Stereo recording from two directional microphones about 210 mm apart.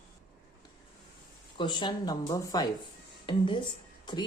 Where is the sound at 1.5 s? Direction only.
20° left (ahead or behind).